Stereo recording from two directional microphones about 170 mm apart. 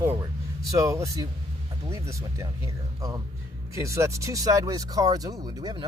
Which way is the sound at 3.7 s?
15° right (ahead or behind).